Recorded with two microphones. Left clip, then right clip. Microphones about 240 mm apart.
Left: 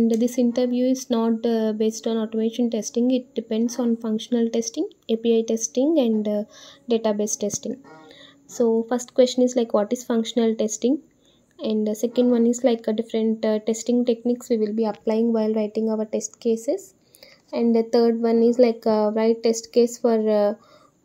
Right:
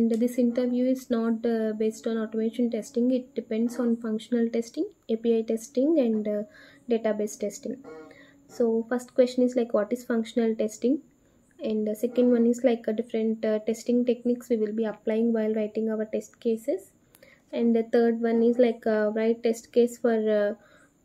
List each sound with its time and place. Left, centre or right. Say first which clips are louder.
0.1 s speech: left 4 dB; left
7.0 s speech: left 4 dB; left